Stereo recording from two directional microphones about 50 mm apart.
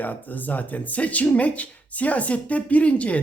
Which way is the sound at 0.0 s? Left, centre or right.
Left.